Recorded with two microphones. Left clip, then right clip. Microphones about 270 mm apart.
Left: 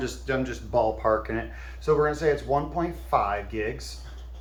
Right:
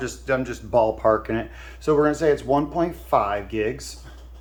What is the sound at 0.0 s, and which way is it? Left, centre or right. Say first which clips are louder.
Speech: right 4 dB; centre.